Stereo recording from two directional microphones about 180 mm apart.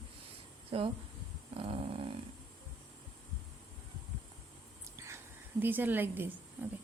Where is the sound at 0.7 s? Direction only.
30° right (ahead or behind).